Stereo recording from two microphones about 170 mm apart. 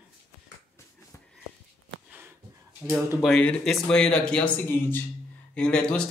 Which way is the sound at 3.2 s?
5° left (ahead or behind).